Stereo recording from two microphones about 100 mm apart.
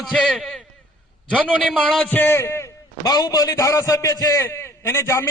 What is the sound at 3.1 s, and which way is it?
A man's voice, 40° left (ahead or behind).